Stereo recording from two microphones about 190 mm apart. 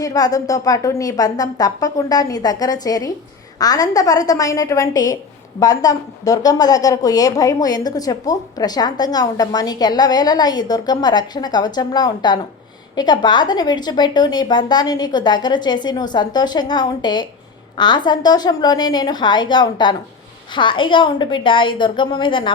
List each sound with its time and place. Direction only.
0.0 s a woman's voice: 20° left (ahead or behind)